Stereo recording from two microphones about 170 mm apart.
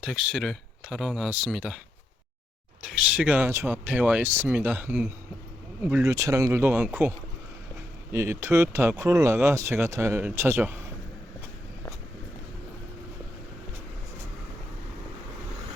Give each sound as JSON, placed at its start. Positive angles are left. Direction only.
{"t": 0.0, "sound": "speech", "side_deg": 0}
{"t": 2.8, "sound": "speech", "side_deg": -5}
{"t": 8.1, "sound": "speech", "side_deg": -15}